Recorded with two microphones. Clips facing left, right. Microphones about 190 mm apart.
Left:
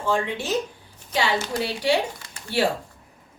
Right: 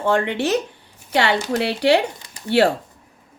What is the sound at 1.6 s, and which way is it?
Speech, 70° right (ahead or behind).